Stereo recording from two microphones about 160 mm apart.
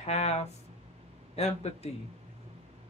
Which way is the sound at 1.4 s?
40° left (ahead or behind).